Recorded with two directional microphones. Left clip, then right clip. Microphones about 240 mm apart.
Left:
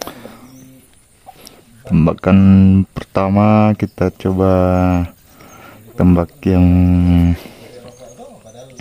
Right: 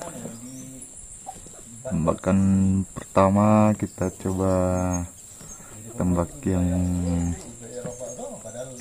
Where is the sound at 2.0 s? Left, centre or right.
Left.